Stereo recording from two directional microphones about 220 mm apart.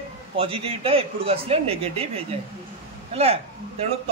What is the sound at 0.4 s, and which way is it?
A man's voice, 25° right (ahead or behind).